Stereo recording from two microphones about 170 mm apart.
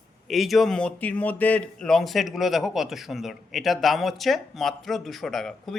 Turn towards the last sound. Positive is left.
turn(degrees=0)  # may be behind; listen again after turning